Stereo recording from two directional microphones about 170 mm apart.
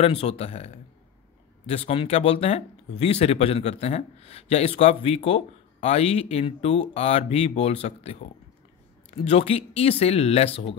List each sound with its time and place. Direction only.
0.0 s speech: 35° left (ahead or behind)